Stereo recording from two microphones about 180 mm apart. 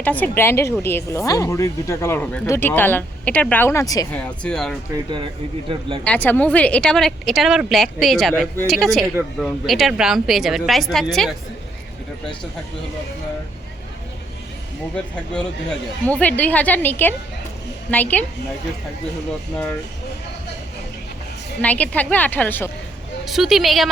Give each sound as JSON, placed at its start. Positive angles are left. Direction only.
{"t": 0.0, "sound": "speech", "side_deg": 10}
{"t": 4.1, "sound": "speech", "side_deg": 5}
{"t": 5.0, "sound": "speech", "side_deg": -25}
{"t": 6.1, "sound": "speech", "side_deg": 10}
{"t": 15.1, "sound": "speech", "side_deg": 5}
{"t": 21.6, "sound": "speech", "side_deg": 10}
{"t": 23.2, "sound": "speech", "side_deg": 0}